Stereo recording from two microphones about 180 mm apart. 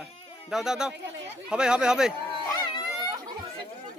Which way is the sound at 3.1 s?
20° right (ahead or behind).